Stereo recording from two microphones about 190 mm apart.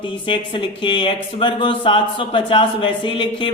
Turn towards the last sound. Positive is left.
turn(degrees=25)  # may be behind; listen again after turning